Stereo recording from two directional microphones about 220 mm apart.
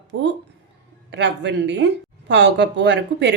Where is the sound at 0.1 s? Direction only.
55° right (ahead or behind).